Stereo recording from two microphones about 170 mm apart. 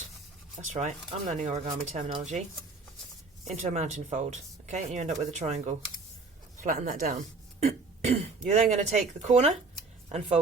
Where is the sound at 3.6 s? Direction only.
45° right (ahead or behind).